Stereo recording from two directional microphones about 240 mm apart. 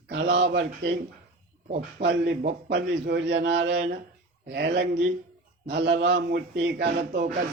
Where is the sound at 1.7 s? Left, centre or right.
Right.